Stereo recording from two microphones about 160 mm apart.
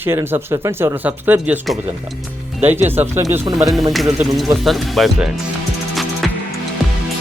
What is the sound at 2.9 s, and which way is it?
Speech, 15° right (ahead or behind).